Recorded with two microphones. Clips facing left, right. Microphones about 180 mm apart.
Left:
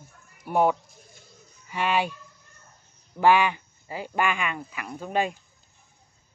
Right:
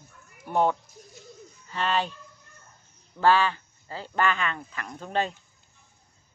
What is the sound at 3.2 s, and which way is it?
Speech, 15° left (ahead or behind).